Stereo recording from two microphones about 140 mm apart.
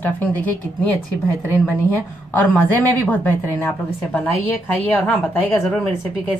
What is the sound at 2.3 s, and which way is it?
Speech, 10° left (ahead or behind).